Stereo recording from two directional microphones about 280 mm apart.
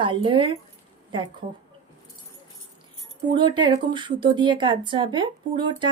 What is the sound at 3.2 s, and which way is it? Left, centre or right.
Speech, centre.